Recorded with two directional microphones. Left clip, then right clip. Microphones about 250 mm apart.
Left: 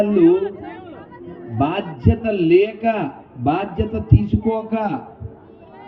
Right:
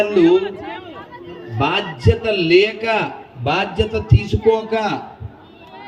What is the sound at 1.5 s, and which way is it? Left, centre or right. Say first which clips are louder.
A man's voice: right 2 dB; left.